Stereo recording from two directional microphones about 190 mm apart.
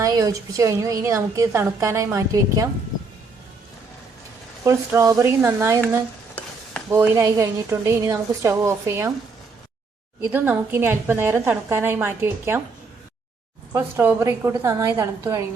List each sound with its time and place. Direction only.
0.0 s a woman's voice: 15° right (ahead or behind)
4.6 s a woman's voice: 15° right (ahead or behind)
6.9 s a woman's voice: 15° right (ahead or behind)
10.3 s a woman's voice: 10° right (ahead or behind)
13.7 s a woman's voice: 10° right (ahead or behind)